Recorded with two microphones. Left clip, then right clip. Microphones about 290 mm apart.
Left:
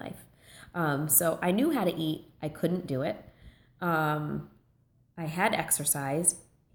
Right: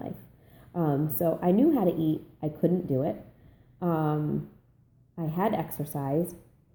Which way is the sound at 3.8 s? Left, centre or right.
Left.